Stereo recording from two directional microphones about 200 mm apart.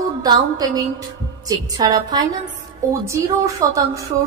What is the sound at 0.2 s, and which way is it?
A woman's voice, 20° right (ahead or behind).